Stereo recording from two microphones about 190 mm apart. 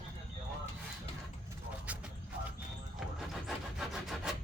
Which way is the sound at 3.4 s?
Centre (ahead or behind).